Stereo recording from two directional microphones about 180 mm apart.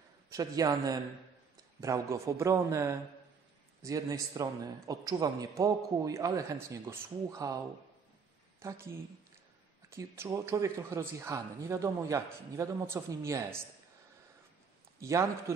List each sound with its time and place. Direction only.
0.3 s a man's voice: 20° right (ahead or behind)
8.5 s a woman's voice: 15° right (ahead or behind)
9.8 s speech: 15° right (ahead or behind)
15.0 s speech: 15° right (ahead or behind)